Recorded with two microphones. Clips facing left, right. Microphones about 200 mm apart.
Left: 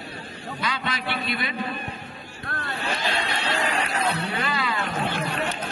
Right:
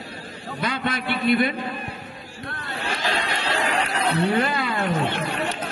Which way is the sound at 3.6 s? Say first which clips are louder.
Right 2 dB; 65° right (ahead or behind).